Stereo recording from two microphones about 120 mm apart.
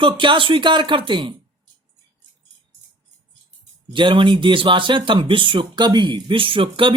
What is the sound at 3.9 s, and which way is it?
Speech, 45° right (ahead or behind).